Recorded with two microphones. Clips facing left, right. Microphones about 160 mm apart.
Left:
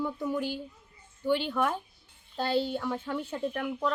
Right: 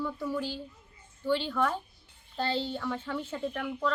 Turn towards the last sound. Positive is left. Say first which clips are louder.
# left 1 dB
turn(degrees=10)  # may be behind; listen again after turning